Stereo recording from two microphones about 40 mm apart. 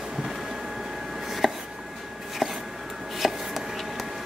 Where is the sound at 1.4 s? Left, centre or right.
Centre.